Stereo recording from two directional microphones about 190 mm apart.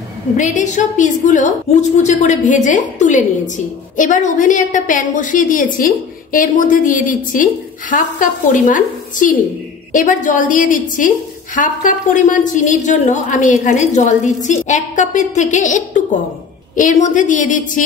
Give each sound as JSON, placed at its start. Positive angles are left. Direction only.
{"t": 0.4, "sound": "a woman's voice", "side_deg": 40}